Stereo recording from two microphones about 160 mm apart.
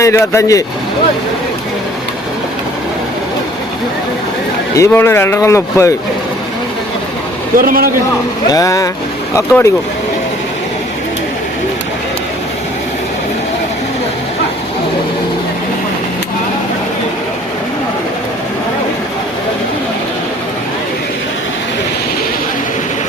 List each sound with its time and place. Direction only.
0.0 s speech: 20° left (ahead or behind)
4.7 s speech: 15° left (ahead or behind)
7.5 s a man's voice: 65° right (ahead or behind)
8.5 s speech: 20° left (ahead or behind)